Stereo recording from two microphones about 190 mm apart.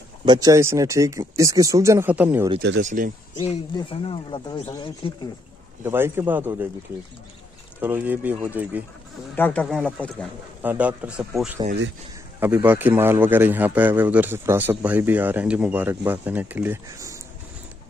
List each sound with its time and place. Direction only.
0.2 s a man's voice: 20° right (ahead or behind)
2.8 s speech: 40° right (ahead or behind)
3.3 s speech: 25° left (ahead or behind)
5.9 s a man's voice: 10° right (ahead or behind)
7.8 s a man's voice: 10° right (ahead or behind)
9.3 s speech: 10° left (ahead or behind)
10.6 s a man's voice: 10° right (ahead or behind)